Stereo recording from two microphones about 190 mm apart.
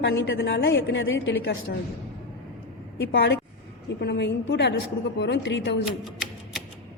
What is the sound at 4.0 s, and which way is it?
A woman's voice, 65° left (ahead or behind).